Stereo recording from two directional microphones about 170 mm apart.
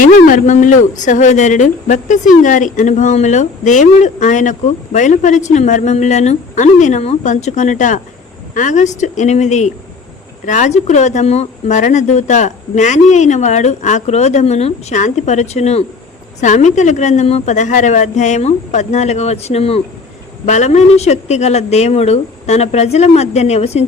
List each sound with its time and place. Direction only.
0.0 s a woman's voice: 50° left (ahead or behind)